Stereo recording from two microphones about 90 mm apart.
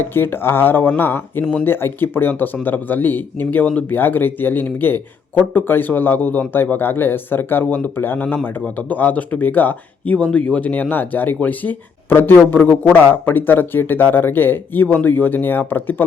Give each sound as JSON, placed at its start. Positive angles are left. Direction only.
{"t": 0.0, "sound": "speech", "side_deg": 25}